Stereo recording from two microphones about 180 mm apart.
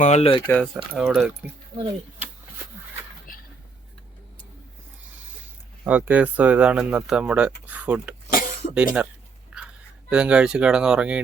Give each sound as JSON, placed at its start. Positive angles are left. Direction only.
{"t": 0.0, "sound": "speech", "side_deg": 35}
{"t": 0.9, "sound": "speech", "side_deg": 0}
{"t": 5.8, "sound": "speech", "side_deg": -10}
{"t": 8.3, "sound": "a sound", "side_deg": 50}
{"t": 8.7, "sound": "speech", "side_deg": -5}
{"t": 9.5, "sound": "a sound", "side_deg": -5}
{"t": 10.1, "sound": "speech", "side_deg": -5}